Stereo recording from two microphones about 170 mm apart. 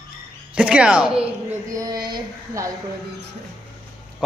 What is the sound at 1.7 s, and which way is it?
Speech, 20° right (ahead or behind).